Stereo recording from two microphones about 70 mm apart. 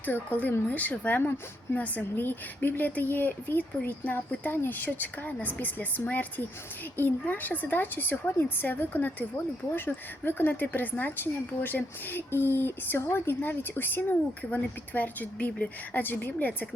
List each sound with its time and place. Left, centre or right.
0.0 s speech: left